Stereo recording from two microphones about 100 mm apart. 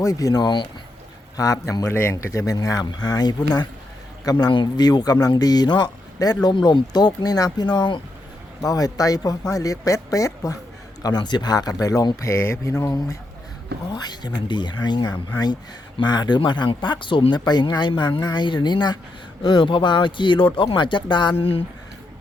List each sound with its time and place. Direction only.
0.0 s a man's voice: 35° left (ahead or behind)
8.6 s a man's voice: 35° left (ahead or behind)
13.9 s speech: 45° left (ahead or behind)
21.3 s speech: 70° left (ahead or behind)